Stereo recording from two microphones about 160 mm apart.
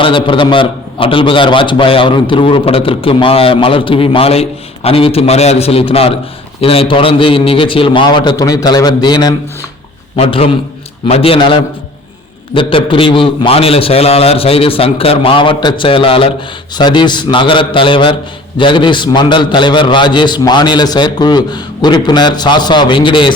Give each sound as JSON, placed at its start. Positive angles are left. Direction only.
{"t": 0.0, "sound": "a man's voice", "side_deg": 30}